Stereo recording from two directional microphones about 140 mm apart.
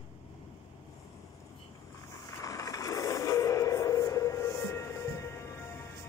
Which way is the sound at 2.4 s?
25° left (ahead or behind).